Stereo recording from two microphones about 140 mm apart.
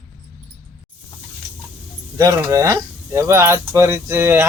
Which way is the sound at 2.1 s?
25° right (ahead or behind).